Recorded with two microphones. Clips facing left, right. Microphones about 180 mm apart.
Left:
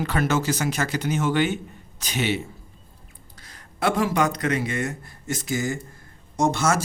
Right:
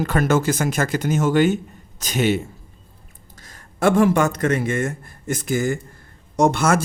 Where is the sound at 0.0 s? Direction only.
45° right (ahead or behind).